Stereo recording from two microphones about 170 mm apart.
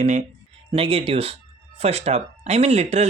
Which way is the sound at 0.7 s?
35° right (ahead or behind).